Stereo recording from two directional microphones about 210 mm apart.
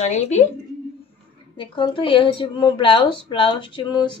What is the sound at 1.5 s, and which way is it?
A woman's voice, 25° left (ahead or behind).